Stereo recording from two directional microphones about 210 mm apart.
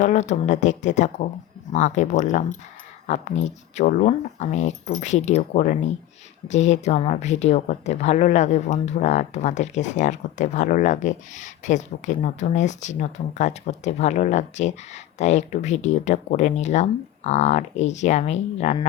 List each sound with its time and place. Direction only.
0.0 s speech: 35° left (ahead or behind)